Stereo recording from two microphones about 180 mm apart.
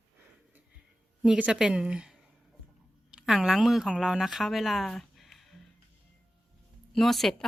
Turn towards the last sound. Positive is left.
turn(degrees=0)  # may be behind; listen again after turning